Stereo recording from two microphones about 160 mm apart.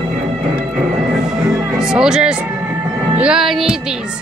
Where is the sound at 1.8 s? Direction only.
5° right (ahead or behind).